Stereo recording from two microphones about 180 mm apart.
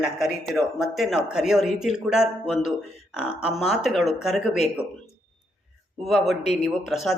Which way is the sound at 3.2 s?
35° left (ahead or behind).